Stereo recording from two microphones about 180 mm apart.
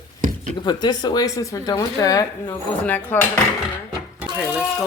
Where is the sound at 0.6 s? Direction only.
25° left (ahead or behind).